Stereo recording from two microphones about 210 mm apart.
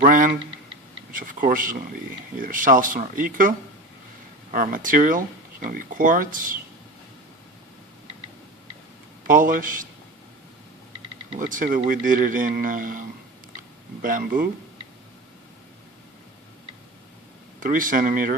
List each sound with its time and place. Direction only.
0.0 s speech: 40° right (ahead or behind)
4.5 s speech: 40° right (ahead or behind)
9.2 s speech: 40° right (ahead or behind)
11.3 s speech: 40° right (ahead or behind)
13.6 s a sound: 40° right (ahead or behind)
17.6 s speech: 40° right (ahead or behind)